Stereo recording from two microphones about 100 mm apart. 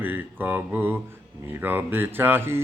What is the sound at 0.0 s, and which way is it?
Mantra, 20° right (ahead or behind).